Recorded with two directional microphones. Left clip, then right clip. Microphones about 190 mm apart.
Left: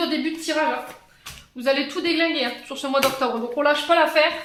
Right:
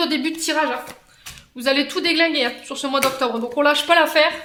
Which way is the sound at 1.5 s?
35° right (ahead or behind).